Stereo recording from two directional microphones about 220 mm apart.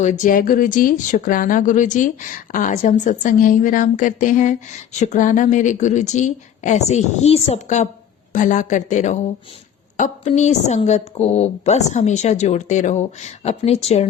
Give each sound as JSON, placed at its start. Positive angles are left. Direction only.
{"t": 0.0, "sound": "speech", "side_deg": 35}